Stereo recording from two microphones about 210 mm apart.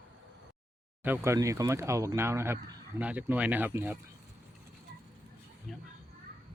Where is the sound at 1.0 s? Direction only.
10° right (ahead or behind).